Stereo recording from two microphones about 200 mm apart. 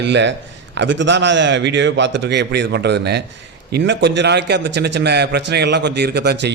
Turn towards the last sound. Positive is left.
turn(degrees=-55)  # may be behind; listen again after turning